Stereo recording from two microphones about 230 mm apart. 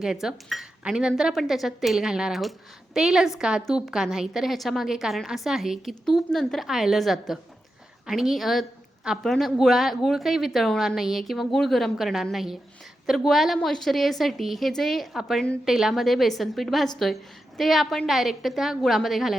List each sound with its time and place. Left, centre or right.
0.0 s a woman's voice: centre